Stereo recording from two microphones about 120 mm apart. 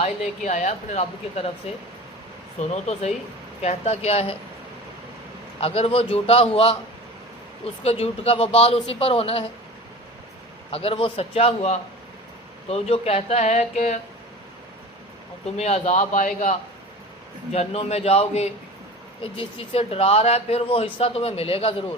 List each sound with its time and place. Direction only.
0.0 s a woman's voice: 85° left; by 4.4 s 55° left (ahead or behind)
5.5 s a man's voice: 55° left (ahead or behind)
7.9 s speech: 55° left (ahead or behind)
10.7 s a man's voice: 55° left (ahead or behind); by 14.0 s 75° left (ahead or behind)
15.5 s a woman's voice: 65° left (ahead or behind); by 16.6 s 90° left
17.5 s a man's voice: 60° left (ahead or behind)